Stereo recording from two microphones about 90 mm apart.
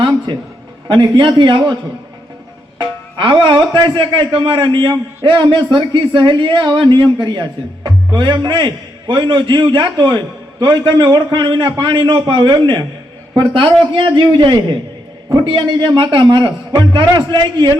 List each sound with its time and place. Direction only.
0.9 s speech: 65° right (ahead or behind)
2.7 s a woman's voice: 55° right (ahead or behind)